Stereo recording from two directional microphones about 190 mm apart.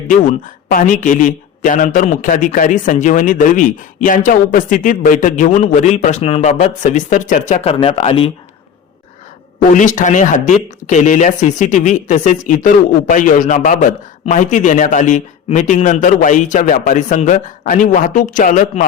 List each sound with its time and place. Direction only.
0.1 s a man's voice: 45° left (ahead or behind)
9.7 s speech: 40° left (ahead or behind)